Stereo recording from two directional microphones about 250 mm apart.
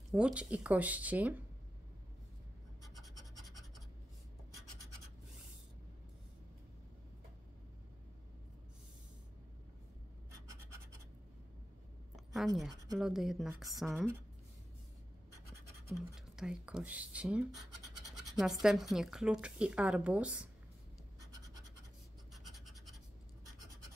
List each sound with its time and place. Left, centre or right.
0.1 s a woman's voice: centre
12.4 s a woman's voice: centre
16.3 s a woman's voice: centre
22.3 s scratch: centre